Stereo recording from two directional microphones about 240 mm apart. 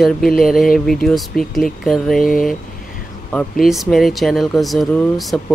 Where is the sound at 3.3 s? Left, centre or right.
Centre.